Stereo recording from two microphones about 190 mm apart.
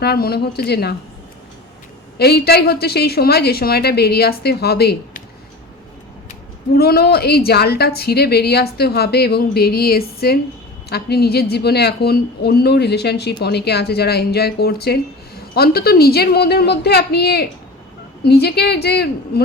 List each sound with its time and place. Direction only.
0.0 s a woman's voice: 55° left (ahead or behind)
2.1 s a woman's voice: 60° left (ahead or behind)
6.7 s a woman's voice: 55° left (ahead or behind)